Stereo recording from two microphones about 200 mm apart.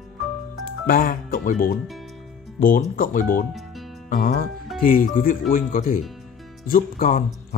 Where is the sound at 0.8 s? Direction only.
45° left (ahead or behind).